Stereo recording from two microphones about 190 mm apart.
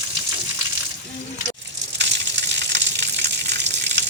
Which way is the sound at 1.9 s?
65° right (ahead or behind).